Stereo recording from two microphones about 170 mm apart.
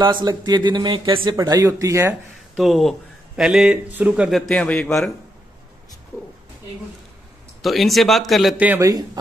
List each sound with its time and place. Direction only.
0.0 s speech: 25° right (ahead or behind)
2.5 s speech: centre (ahead or behind)
7.6 s speech: centre (ahead or behind)
8.8 s speech: 20° right (ahead or behind)